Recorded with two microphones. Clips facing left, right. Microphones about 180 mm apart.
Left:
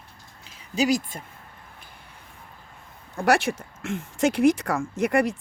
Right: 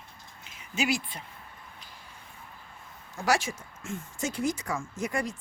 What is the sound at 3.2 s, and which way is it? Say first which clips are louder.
Speech: left 6 dB; 60° left (ahead or behind).